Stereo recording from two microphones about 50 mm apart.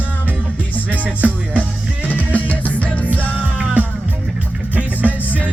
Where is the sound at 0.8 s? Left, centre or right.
Right.